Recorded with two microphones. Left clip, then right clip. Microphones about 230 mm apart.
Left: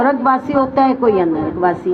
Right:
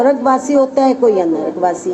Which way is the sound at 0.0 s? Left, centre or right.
Left.